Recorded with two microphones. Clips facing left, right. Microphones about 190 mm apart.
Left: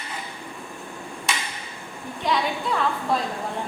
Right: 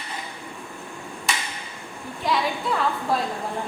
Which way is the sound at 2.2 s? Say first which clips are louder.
Even; centre (ahead or behind).